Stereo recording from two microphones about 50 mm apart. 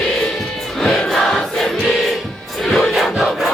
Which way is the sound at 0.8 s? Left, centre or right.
Centre.